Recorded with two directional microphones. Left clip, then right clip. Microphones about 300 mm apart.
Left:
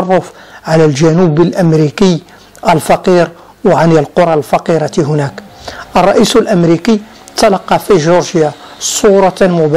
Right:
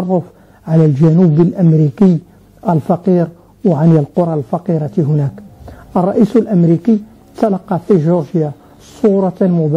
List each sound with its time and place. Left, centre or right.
0.0 s speech: centre
1.8 s a woman's voice: left
2.6 s speech: centre
9.0 s speech: centre